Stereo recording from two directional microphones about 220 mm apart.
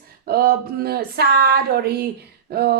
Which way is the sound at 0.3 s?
45° right (ahead or behind).